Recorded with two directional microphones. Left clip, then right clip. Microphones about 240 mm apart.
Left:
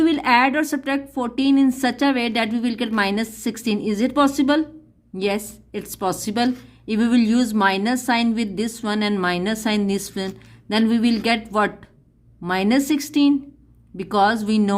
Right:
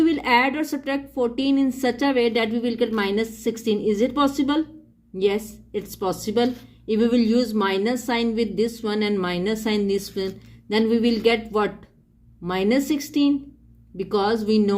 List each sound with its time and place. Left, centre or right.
0.0 s a woman's voice: left